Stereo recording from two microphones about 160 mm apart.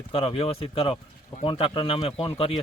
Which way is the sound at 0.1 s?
35° left (ahead or behind).